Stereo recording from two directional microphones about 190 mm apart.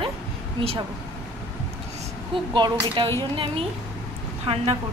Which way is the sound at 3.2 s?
25° right (ahead or behind).